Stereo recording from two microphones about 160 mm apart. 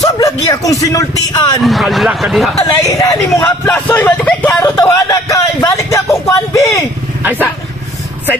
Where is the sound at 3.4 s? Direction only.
10° left (ahead or behind).